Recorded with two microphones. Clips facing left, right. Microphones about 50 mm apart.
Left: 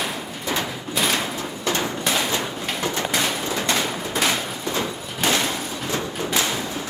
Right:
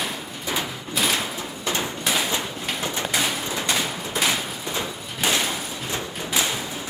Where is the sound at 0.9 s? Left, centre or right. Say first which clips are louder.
Left 1 dB; centre.